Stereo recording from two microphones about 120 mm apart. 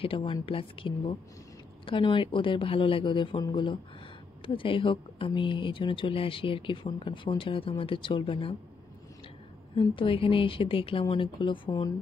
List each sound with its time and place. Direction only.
0.0 s speech: 45° left (ahead or behind)
9.8 s speech: 45° left (ahead or behind)